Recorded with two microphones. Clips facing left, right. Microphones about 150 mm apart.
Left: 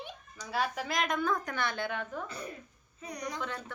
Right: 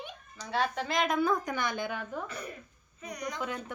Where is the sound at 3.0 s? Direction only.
30° left (ahead or behind).